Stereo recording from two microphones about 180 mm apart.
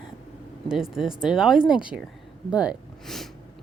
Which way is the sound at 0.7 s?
5° right (ahead or behind).